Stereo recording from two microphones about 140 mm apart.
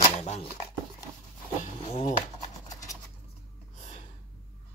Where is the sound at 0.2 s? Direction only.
55° left (ahead or behind).